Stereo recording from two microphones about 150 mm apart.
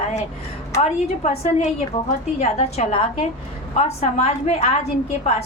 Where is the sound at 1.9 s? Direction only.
40° left (ahead or behind).